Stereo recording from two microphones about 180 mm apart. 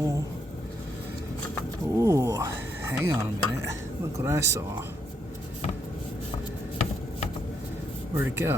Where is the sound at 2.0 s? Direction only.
15° right (ahead or behind).